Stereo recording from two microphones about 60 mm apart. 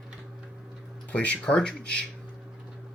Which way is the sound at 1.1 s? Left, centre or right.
Left.